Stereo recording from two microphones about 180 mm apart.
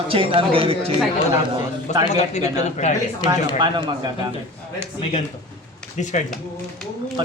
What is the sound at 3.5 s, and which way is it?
Speech, 25° right (ahead or behind).